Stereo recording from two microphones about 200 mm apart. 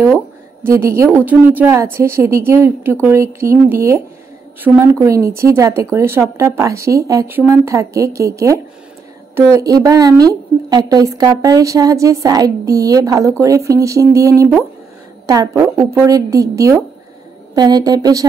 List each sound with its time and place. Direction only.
0.9 s a woman's voice: 15° right (ahead or behind)
5.0 s a woman's voice: 15° right (ahead or behind)